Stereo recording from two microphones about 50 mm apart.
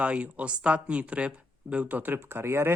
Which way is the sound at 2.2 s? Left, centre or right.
Right.